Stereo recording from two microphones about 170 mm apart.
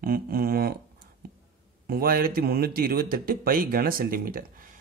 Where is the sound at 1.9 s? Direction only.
60° right (ahead or behind).